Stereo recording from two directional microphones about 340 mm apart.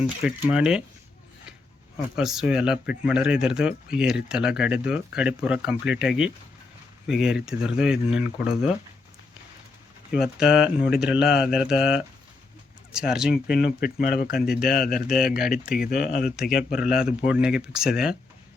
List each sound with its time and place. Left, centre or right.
0.0 s speech: centre
2.1 s speech: centre
10.1 s speech: centre
13.8 s speech: left
14.3 s speech: centre
15.9 s speech: left
16.2 s speech: centre